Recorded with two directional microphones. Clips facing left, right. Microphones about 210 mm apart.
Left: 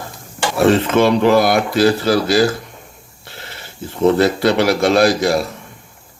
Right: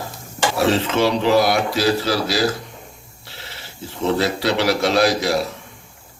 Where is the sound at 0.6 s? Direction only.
55° left (ahead or behind).